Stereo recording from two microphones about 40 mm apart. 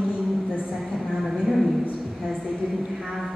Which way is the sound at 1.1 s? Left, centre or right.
Centre.